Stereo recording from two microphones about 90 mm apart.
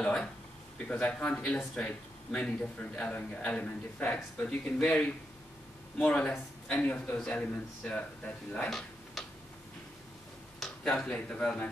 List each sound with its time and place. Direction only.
0.0 s a sound: 10° left (ahead or behind)
0.8 s a man's voice: 15° left (ahead or behind)
8.6 s tick-tock: centre (ahead or behind)
10.6 s speech: 5° left (ahead or behind)